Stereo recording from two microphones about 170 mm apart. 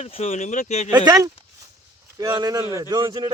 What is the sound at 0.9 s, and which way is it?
Speech, 25° right (ahead or behind).